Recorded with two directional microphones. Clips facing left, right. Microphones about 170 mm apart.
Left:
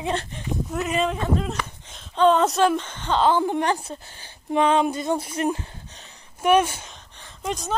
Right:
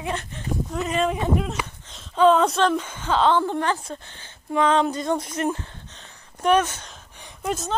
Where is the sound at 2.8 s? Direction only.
5° right (ahead or behind); by 3.8 s 15° left (ahead or behind).